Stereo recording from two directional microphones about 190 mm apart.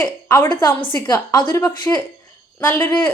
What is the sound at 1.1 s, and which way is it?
Speech, 15° left (ahead or behind).